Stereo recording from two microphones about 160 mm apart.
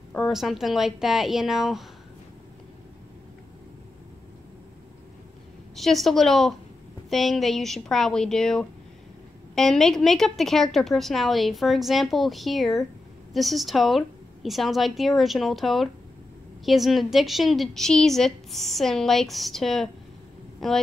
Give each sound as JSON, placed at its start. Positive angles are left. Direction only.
{"t": 0.1, "sound": "a woman's voice", "side_deg": 0}
{"t": 5.8, "sound": "a woman's voice", "side_deg": 0}